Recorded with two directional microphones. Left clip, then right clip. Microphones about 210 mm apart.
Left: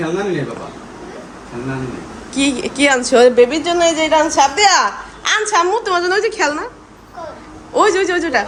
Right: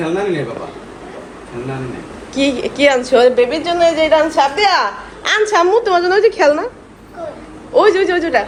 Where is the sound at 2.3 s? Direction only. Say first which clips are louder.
Right 2 dB; 20° left (ahead or behind).